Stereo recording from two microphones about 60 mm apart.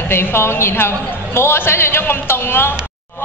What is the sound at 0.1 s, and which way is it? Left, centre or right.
A man's voice, left.